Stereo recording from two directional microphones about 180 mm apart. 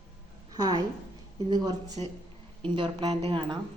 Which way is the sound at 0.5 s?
20° right (ahead or behind).